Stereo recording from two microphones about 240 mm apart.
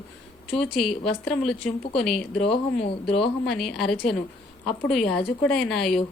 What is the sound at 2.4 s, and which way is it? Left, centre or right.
Speech, left.